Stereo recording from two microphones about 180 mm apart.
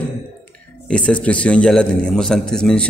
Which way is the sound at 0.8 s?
5° left (ahead or behind).